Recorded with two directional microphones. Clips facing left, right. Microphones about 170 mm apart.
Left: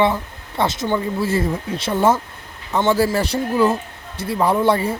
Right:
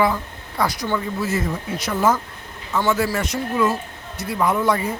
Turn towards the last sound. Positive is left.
turn(degrees=30)  # may be behind; listen again after turning